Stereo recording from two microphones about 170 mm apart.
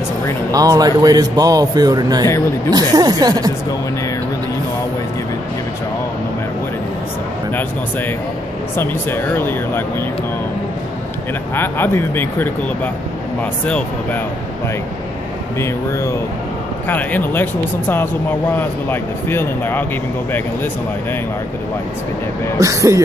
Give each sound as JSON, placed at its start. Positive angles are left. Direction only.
{"t": 0.5, "sound": "a man's voice", "side_deg": -20}
{"t": 8.7, "sound": "speech", "side_deg": 15}
{"t": 11.5, "sound": "speech", "side_deg": 10}
{"t": 15.6, "sound": "speech", "side_deg": 15}
{"t": 22.6, "sound": "a man's voice", "side_deg": -20}